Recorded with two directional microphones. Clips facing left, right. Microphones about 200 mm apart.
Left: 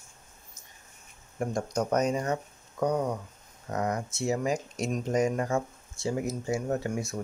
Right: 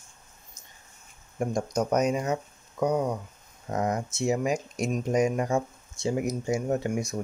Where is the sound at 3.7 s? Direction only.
25° right (ahead or behind).